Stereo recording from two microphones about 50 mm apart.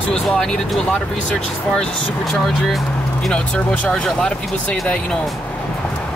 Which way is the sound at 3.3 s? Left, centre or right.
Left.